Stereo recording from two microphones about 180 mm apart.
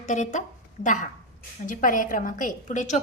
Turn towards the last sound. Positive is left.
turn(degrees=40)  # may be behind; listen again after turning